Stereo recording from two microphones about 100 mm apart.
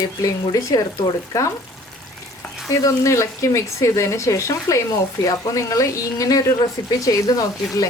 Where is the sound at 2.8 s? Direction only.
30° left (ahead or behind).